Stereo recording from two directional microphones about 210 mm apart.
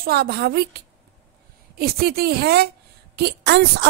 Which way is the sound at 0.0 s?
50° right (ahead or behind).